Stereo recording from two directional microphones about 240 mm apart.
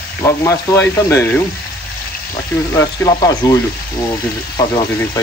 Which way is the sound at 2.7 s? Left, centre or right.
Centre.